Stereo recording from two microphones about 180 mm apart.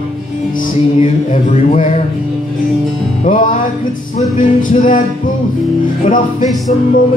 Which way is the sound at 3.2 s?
45° left (ahead or behind).